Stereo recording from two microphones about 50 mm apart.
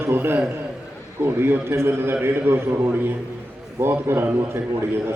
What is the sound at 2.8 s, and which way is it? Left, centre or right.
A man's voice, right.